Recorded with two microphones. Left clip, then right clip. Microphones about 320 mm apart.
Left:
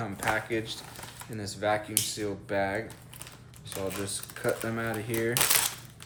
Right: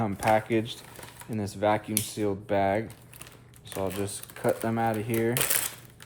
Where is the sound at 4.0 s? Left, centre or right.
Centre.